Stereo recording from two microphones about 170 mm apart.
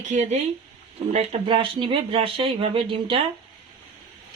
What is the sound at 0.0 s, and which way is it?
Speech, 45° right (ahead or behind).